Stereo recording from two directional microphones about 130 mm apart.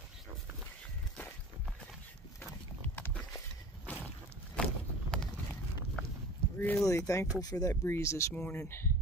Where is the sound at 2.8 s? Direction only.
15° left (ahead or behind).